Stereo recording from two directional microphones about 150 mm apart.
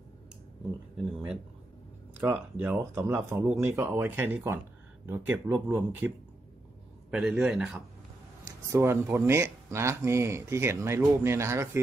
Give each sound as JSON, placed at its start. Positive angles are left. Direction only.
{"t": 2.1, "sound": "a man's voice", "side_deg": -10}
{"t": 8.6, "sound": "speech", "side_deg": -15}